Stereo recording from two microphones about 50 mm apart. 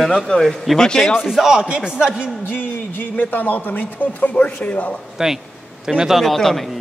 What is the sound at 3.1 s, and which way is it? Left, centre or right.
Speech, left.